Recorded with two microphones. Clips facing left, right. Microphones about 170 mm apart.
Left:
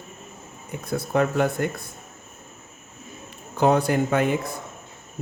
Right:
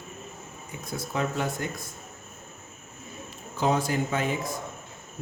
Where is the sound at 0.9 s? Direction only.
60° left (ahead or behind).